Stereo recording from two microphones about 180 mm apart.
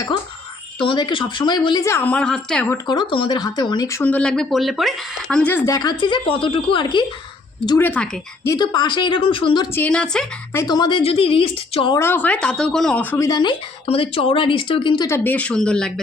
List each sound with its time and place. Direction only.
0.8 s speech: 25° left (ahead or behind); by 2.7 s 5° left (ahead or behind)
2.7 s speech: 25° left (ahead or behind)
7.8 s speech: 10° left (ahead or behind)
8.4 s speech: 25° left (ahead or behind)
9.7 s a woman's voice: 5° left (ahead or behind)
10.5 s speech: 20° left (ahead or behind)
11.9 s speech: 10° left (ahead or behind)